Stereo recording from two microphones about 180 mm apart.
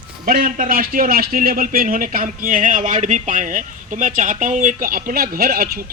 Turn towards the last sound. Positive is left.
turn(degrees=-55)  # may be behind; listen again after turning